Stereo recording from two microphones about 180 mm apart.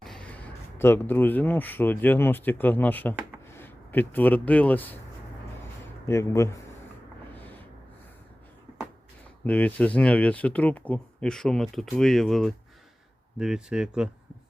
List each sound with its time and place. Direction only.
0.0 s a sound: 5° left (ahead or behind)
0.8 s speech: 10° left (ahead or behind)
6.1 s speech: 15° left (ahead or behind)
9.4 s speech: 10° left (ahead or behind)